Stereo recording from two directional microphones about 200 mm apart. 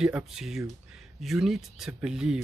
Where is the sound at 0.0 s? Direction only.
5° right (ahead or behind).